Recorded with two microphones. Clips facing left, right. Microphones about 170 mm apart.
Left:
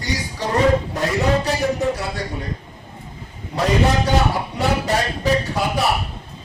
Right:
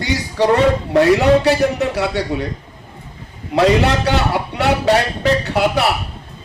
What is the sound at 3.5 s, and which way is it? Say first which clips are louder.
Music: right 5 dB; 80° right.